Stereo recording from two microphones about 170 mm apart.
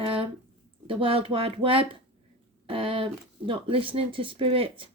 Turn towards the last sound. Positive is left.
turn(degrees=-35)  # may be behind; listen again after turning